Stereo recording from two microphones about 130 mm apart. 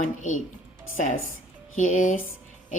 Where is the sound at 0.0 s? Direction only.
70° left (ahead or behind).